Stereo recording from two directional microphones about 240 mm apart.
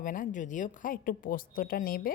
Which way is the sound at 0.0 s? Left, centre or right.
Left.